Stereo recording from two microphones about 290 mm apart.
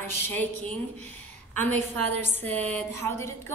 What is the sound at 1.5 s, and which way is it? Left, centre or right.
Speech, right.